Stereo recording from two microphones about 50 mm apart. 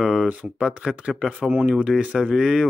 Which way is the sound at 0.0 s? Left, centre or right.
Centre.